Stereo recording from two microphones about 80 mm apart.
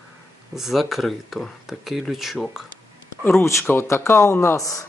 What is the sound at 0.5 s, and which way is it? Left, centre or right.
Speech, centre.